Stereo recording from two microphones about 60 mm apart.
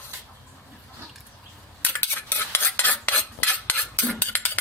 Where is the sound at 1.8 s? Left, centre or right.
Left.